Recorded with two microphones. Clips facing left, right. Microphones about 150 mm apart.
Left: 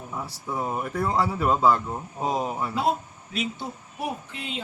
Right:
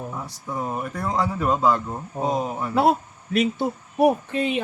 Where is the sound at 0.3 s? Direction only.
5° left (ahead or behind).